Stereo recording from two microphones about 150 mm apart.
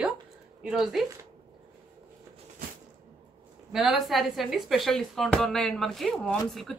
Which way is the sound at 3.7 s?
Centre (ahead or behind).